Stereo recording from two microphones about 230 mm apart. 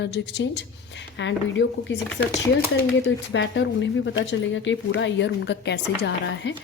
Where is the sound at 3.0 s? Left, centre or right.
Left.